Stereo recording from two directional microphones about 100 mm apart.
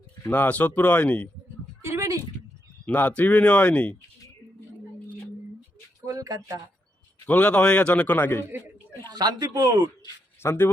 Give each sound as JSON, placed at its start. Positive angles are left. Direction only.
{"t": 0.3, "sound": "speech", "side_deg": 15}
{"t": 1.8, "sound": "a sound", "side_deg": -30}
{"t": 2.8, "sound": "speech", "side_deg": 15}
{"t": 6.1, "sound": "a sound", "side_deg": -35}
{"t": 7.3, "sound": "speech", "side_deg": 15}
{"t": 8.4, "sound": "a man's voice", "side_deg": -20}
{"t": 9.0, "sound": "speech", "side_deg": -40}
{"t": 10.4, "sound": "speech", "side_deg": 25}